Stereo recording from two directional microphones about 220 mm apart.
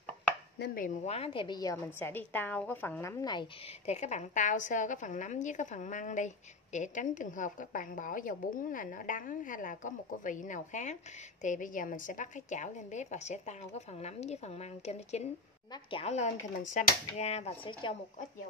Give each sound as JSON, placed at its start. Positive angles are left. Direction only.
{"t": 0.6, "sound": "a woman's voice", "side_deg": 40}
{"t": 3.8, "sound": "a woman's voice", "side_deg": 30}